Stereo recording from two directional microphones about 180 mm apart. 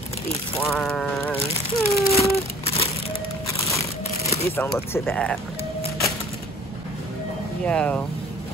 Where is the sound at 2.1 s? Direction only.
35° left (ahead or behind).